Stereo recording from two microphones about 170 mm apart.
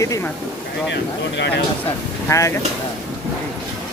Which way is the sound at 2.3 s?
20° left (ahead or behind).